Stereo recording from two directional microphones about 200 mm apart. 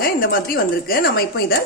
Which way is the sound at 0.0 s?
45° left (ahead or behind).